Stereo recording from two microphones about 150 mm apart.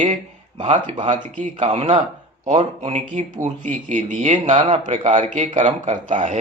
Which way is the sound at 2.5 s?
45° right (ahead or behind).